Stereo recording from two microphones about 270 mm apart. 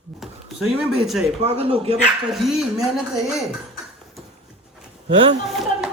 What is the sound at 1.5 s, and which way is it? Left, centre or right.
Speech, right.